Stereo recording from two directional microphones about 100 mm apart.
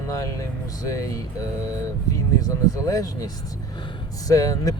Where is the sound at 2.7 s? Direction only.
35° left (ahead or behind).